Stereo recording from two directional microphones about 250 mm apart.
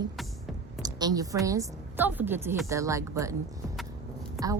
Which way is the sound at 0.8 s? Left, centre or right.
Centre.